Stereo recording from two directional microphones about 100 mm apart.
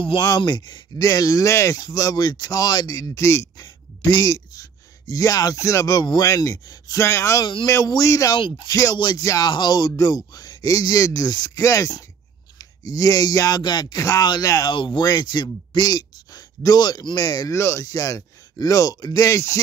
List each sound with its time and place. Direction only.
0.4 s speech: 45° left (ahead or behind); by 3.6 s 30° left (ahead or behind)
3.6 s speech: 40° left (ahead or behind)
7.0 s speech: 25° left (ahead or behind)
7.3 s speech: 50° left (ahead or behind)
7.6 s speech: 30° left (ahead or behind)
8.4 s speech: 60° left (ahead or behind)
8.6 s speech: 35° left (ahead or behind)
8.9 s speech: 50° left (ahead or behind)
9.2 s speech: 35° left (ahead or behind)
11.5 s speech: 30° left (ahead or behind)
14.7 s speech: 50° left (ahead or behind)
17.6 s speech: 25° left (ahead or behind)